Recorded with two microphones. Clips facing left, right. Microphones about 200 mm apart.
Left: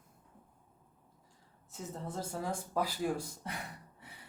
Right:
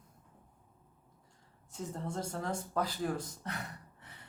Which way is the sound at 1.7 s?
5° left (ahead or behind).